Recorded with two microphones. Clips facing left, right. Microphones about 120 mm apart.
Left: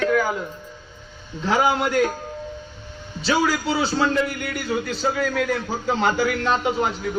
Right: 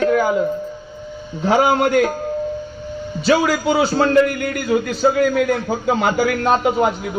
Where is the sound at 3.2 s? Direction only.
55° right (ahead or behind).